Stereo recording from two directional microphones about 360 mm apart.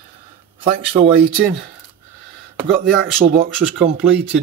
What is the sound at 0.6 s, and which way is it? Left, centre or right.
Speech, centre.